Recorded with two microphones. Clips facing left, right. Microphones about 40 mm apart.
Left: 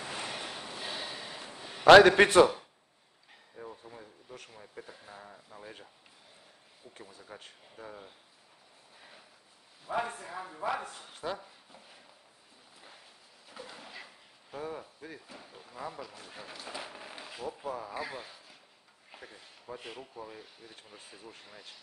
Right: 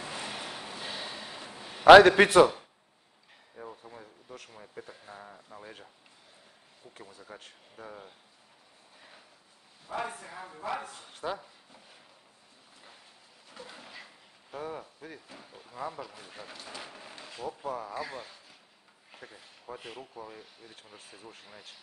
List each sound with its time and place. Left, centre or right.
0.0 s a sound: centre
4.6 s speech: centre
6.9 s speech: centre
9.9 s speech: centre
10.2 s speech: centre
13.5 s speech: centre